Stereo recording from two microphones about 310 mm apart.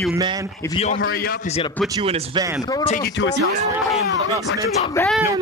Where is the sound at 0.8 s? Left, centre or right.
Left.